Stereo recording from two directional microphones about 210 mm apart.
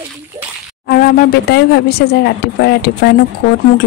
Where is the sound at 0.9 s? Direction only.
45° left (ahead or behind).